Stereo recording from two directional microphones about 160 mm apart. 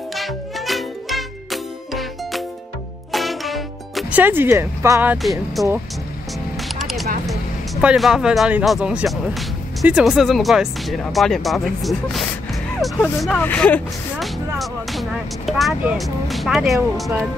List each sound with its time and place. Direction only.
0.1 s music: centre (ahead or behind)
4.2 s speech: 15° right (ahead or behind)
5.2 s speech: centre (ahead or behind)
6.8 s a sound: centre (ahead or behind)
7.2 s speech: centre (ahead or behind)